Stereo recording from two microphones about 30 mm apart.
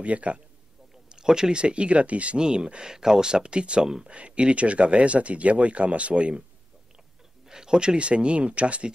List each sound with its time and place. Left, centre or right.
0.0 s speech: right
1.0 s speech: right
2.3 s speech: right
2.9 s speech: centre; by 3.8 s right
3.8 s speech: right
4.1 s speech: right
7.4 s speech: right